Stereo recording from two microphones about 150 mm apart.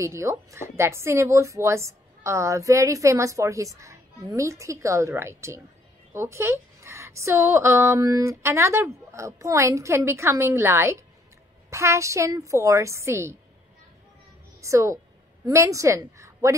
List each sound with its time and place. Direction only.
0.0 s a woman's voice: 20° right (ahead or behind)
14.6 s a woman's voice: 20° right (ahead or behind)